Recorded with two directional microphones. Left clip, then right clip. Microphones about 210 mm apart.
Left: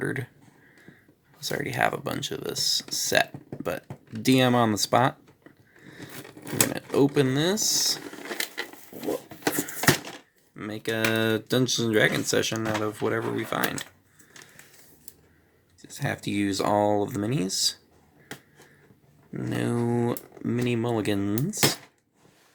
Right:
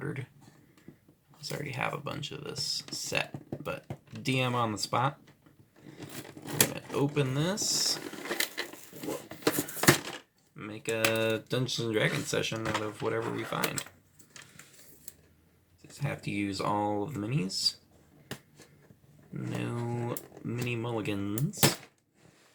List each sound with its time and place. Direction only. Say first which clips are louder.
0.0 s speech: left 9 dB; 50° left (ahead or behind)
1.4 s speech: left 9 dB; 50° left (ahead or behind)
6.7 s speech: left 8 dB; 50° left (ahead or behind)
8.3 s a sound: left 1 dB; 5° right (ahead or behind)
10.5 s speech: left 4 dB; 45° left (ahead or behind)
15.9 s speech: left 7 dB; 45° left (ahead or behind)
19.3 s speech: left 8 dB; 45° left (ahead or behind)